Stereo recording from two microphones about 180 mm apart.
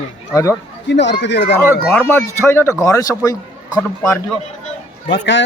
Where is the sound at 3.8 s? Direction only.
5° left (ahead or behind).